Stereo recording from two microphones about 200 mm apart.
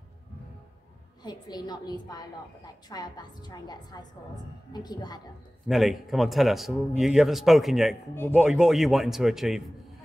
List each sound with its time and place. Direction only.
1.2 s a woman's voice: 20° left (ahead or behind)
5.7 s speech: centre (ahead or behind)